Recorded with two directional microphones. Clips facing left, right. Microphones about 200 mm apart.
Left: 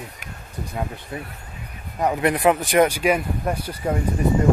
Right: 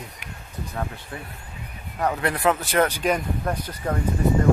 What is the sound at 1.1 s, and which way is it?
Speech, 15° left (ahead or behind).